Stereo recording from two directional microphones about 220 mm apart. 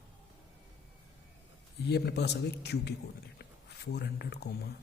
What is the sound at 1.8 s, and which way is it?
Speech, 50° left (ahead or behind).